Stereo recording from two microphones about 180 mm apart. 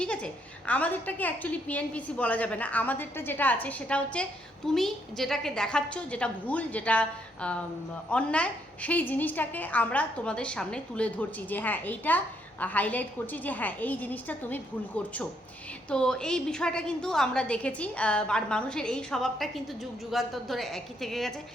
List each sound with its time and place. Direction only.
0.0 s a woman's voice: 5° left (ahead or behind)